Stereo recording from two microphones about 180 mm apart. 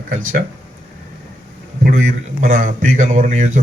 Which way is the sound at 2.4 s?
45° right (ahead or behind).